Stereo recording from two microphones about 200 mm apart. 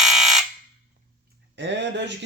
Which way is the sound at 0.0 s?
Centre (ahead or behind).